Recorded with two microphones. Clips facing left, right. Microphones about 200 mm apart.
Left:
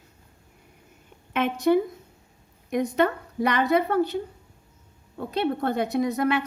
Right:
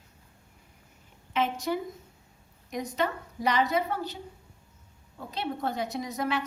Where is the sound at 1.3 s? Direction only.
60° left (ahead or behind).